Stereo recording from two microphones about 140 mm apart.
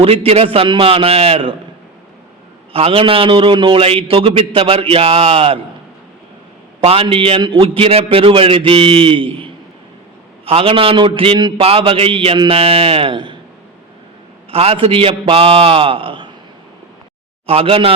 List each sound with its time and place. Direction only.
0.0 s a man's voice: 45° right (ahead or behind)
2.7 s a man's voice: 40° right (ahead or behind)
6.8 s a man's voice: 40° right (ahead or behind)
14.5 s a man's voice: 45° right (ahead or behind)
17.4 s a man's voice: 45° right (ahead or behind)